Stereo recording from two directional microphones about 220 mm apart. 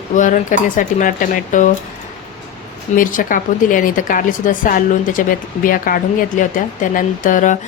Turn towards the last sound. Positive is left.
turn(degrees=35)  # may be behind; listen again after turning